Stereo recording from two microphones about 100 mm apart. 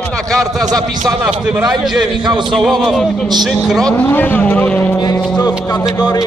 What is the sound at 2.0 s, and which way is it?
Speech, 50° right (ahead or behind).